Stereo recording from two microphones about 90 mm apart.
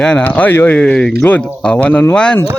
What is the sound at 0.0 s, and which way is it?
Speech, 15° left (ahead or behind).